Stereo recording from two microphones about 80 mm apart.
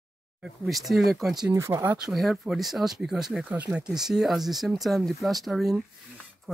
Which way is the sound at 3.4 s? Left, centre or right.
Centre.